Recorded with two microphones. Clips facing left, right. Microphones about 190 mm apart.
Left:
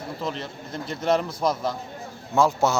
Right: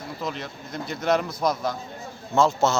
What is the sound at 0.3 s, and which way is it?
Speech, 30° left (ahead or behind).